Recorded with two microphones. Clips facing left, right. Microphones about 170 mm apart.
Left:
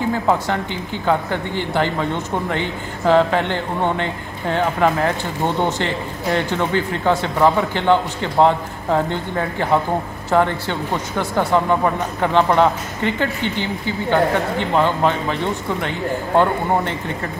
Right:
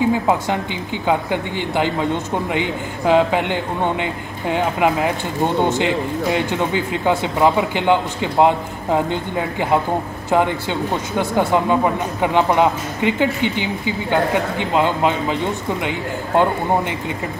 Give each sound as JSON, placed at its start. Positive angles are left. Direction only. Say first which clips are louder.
{"t": 0.1, "sound": "speech", "louder": "right 1 dB", "side_deg": -15}